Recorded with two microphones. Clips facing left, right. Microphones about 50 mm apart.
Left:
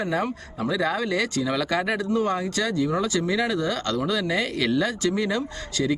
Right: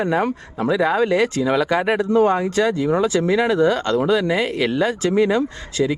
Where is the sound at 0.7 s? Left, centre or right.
Right.